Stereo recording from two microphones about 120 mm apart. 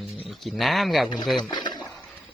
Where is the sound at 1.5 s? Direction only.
35° left (ahead or behind).